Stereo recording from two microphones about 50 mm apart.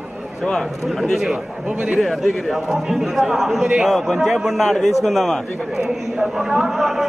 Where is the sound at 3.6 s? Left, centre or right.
Centre.